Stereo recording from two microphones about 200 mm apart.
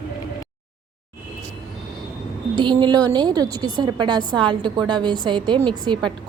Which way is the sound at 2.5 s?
25° right (ahead or behind).